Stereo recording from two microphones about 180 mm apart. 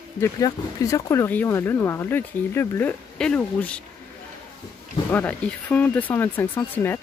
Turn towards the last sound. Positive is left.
turn(degrees=10)  # may be behind; listen again after turning